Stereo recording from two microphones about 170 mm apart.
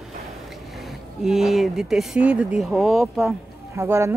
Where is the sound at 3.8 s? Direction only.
15° right (ahead or behind).